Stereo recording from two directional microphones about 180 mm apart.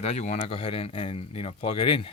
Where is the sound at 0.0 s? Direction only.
35° left (ahead or behind).